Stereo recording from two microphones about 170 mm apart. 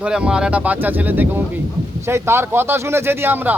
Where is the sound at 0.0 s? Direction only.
5° right (ahead or behind).